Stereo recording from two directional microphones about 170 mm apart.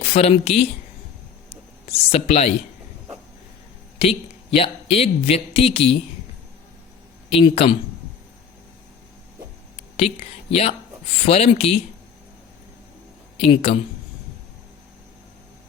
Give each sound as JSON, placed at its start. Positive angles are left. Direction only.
{"t": 0.0, "sound": "speech", "side_deg": 40}
{"t": 1.9, "sound": "speech", "side_deg": 40}
{"t": 3.9, "sound": "speech", "side_deg": 35}
{"t": 7.3, "sound": "speech", "side_deg": 35}
{"t": 10.0, "sound": "speech", "side_deg": 35}
{"t": 13.4, "sound": "speech", "side_deg": 35}